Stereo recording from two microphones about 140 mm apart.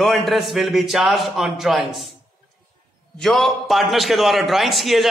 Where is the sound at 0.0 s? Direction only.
Centre (ahead or behind).